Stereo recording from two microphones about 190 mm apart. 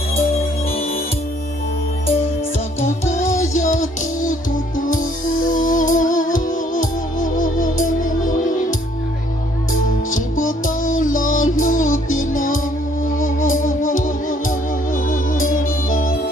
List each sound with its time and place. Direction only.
0.1 s music: 30° left (ahead or behind)
3.1 s music: 15° left (ahead or behind)
3.5 s music: 40° left (ahead or behind)
10.1 s music: 45° left (ahead or behind)